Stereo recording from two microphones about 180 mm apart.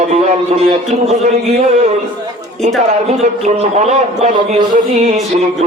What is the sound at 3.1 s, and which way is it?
A man's voice, 40° right (ahead or behind).